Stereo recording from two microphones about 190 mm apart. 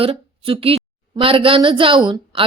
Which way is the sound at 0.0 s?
30° right (ahead or behind).